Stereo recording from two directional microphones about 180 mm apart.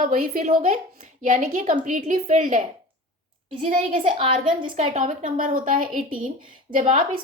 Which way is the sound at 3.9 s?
30° right (ahead or behind).